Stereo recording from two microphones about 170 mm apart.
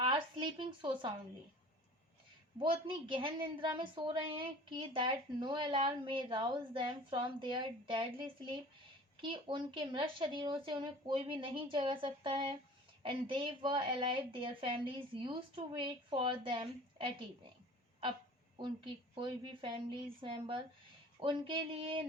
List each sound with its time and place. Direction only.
0.0 s a sound: 30° right (ahead or behind)
2.6 s a woman's voice: 30° right (ahead or behind)
9.2 s a woman's voice: 30° right (ahead or behind)
19.1 s a woman's voice: 30° right (ahead or behind)